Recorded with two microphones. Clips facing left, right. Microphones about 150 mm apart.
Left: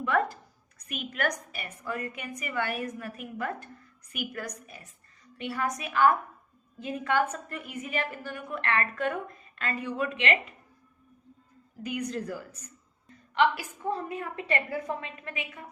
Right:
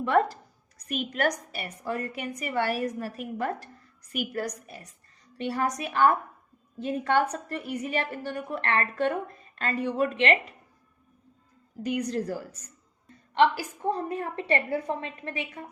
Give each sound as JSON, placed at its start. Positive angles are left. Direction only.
{"t": 0.0, "sound": "a sound", "side_deg": -35}
{"t": 0.9, "sound": "a woman's voice", "side_deg": -30}
{"t": 11.8, "sound": "a woman's voice", "side_deg": -40}